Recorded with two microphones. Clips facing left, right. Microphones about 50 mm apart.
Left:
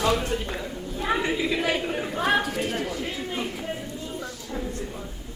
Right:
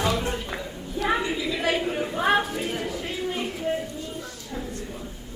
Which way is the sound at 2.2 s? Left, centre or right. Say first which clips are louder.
Right 1 dB; centre.